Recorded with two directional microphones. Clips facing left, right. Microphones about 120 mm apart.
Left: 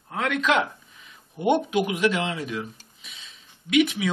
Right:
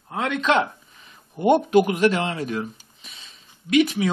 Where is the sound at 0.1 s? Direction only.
25° right (ahead or behind).